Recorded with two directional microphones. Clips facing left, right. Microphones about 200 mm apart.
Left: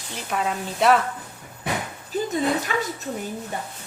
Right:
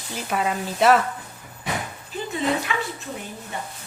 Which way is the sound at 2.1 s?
40° left (ahead or behind).